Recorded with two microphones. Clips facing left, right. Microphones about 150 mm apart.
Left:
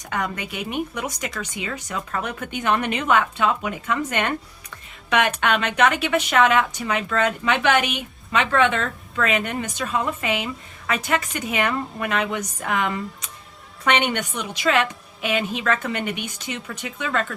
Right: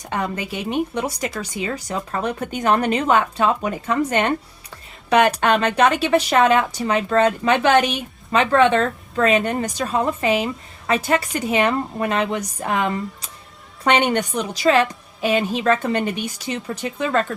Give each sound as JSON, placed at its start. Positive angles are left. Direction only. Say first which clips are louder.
{"t": 0.1, "sound": "a woman's voice", "louder": "right 3 dB", "side_deg": -30}